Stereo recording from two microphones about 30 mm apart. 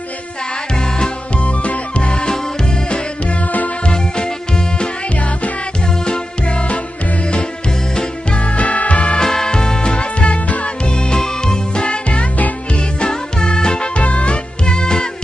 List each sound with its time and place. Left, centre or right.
0.8 s music: left
1.4 s music: left
2.0 s music: left
3.8 s music: left
6.1 s music: left
8.4 s music: left
9.1 s music: left
11.0 s music: left
13.9 s music: left
14.7 s music: left